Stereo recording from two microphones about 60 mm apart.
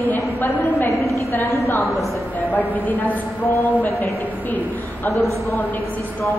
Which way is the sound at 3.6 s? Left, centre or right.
Left.